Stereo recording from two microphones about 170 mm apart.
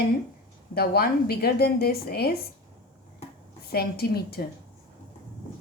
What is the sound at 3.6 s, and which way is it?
Speech, 65° left (ahead or behind).